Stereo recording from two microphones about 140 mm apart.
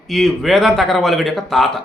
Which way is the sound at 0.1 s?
Centre (ahead or behind).